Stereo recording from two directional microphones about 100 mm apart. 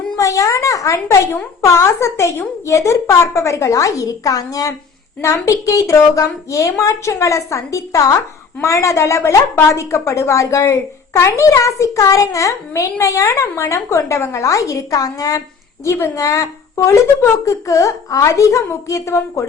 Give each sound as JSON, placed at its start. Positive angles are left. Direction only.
{"t": 0.2, "sound": "a woman's voice", "side_deg": 30}